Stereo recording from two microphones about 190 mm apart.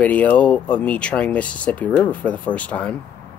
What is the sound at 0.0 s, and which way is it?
Speech, 10° left (ahead or behind).